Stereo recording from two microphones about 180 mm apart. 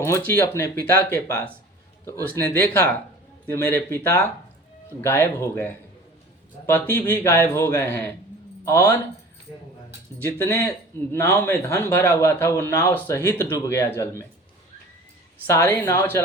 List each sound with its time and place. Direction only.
0.0 s speech: 15° left (ahead or behind)
4.9 s speech: 15° left (ahead or behind)
10.3 s speech: 15° left (ahead or behind)
15.4 s speech: 15° left (ahead or behind)